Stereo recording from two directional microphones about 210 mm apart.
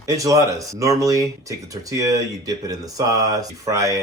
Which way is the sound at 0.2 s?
15° right (ahead or behind).